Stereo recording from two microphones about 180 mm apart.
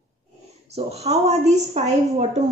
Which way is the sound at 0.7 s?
35° right (ahead or behind).